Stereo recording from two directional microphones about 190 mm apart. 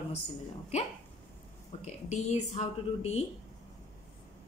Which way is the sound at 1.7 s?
35° left (ahead or behind).